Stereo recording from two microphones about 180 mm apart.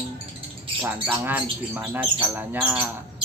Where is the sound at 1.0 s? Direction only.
10° right (ahead or behind).